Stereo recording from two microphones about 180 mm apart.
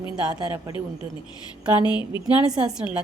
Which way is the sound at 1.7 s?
25° left (ahead or behind).